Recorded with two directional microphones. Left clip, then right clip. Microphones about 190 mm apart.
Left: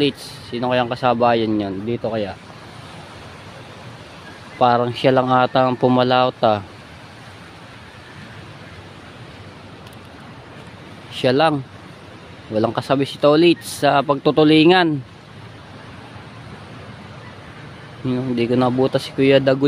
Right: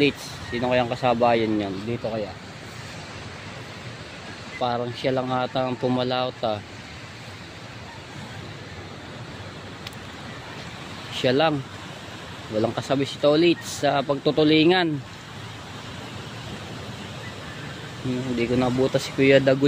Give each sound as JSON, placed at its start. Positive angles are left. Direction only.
{"t": 0.0, "sound": "speech", "side_deg": 25}
{"t": 4.6, "sound": "speech", "side_deg": 35}
{"t": 11.1, "sound": "speech", "side_deg": 25}
{"t": 12.5, "sound": "speech", "side_deg": 30}
{"t": 18.4, "sound": "speech", "side_deg": 30}